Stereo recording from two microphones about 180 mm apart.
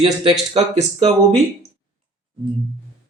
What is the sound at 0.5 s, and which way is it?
Speech, 35° right (ahead or behind).